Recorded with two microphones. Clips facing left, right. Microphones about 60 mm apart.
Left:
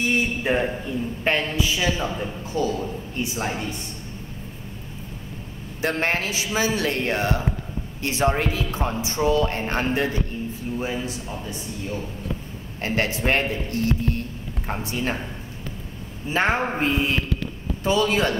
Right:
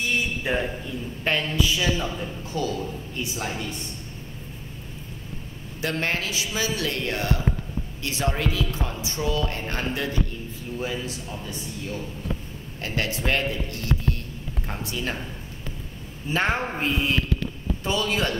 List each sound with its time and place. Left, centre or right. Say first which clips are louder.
0.0 s a man's voice: left 3 dB; left
5.8 s speech: left 3 dB; left
10.8 s a man's voice: even; left
16.3 s a man's voice: left 3 dB; left